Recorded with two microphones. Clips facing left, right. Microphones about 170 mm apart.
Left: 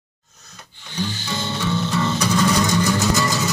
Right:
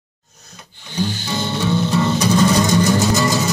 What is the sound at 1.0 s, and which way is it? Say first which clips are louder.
Music: right 4 dB; 35° right (ahead or behind).